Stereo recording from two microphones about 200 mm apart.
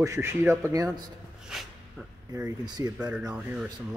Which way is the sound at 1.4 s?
Centre (ahead or behind).